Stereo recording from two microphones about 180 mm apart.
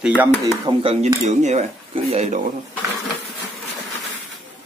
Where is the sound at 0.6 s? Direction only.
35° right (ahead or behind).